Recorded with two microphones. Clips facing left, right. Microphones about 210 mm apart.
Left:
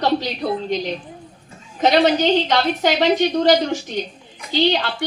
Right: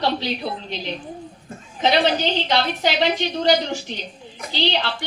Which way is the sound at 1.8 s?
45° left (ahead or behind).